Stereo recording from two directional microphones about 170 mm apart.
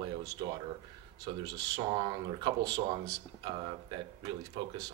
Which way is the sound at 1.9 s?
25° right (ahead or behind).